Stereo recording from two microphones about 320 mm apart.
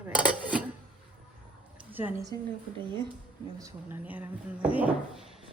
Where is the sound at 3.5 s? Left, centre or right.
Centre.